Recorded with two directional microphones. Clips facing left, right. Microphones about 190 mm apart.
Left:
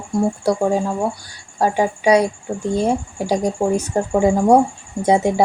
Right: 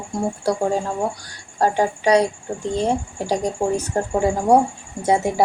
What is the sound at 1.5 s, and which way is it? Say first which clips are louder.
Speech: left 1 dB; 10° left (ahead or behind).